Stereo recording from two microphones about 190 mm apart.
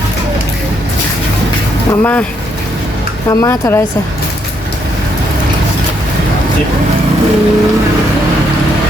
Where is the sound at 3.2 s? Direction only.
15° left (ahead or behind).